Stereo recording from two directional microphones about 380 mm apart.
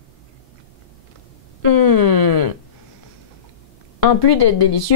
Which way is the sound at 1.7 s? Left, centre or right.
Left.